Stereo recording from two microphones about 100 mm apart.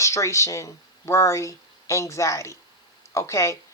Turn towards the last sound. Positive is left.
turn(degrees=30)  # may be behind; listen again after turning